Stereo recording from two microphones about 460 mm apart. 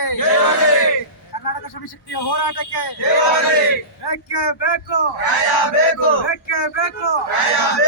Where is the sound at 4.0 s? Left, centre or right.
Left.